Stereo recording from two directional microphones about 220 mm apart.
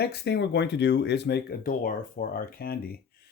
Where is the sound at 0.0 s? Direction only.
50° left (ahead or behind).